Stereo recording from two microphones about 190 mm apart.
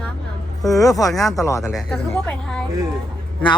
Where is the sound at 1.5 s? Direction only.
15° left (ahead or behind).